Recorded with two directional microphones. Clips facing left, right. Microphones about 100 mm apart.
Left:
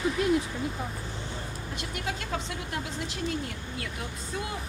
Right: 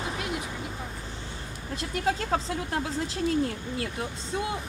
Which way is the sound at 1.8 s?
35° right (ahead or behind).